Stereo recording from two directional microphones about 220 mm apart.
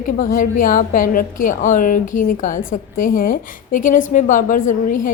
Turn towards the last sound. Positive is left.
turn(degrees=40)  # may be behind; listen again after turning